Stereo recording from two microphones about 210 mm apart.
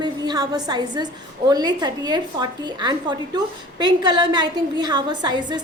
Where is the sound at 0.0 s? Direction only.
20° right (ahead or behind).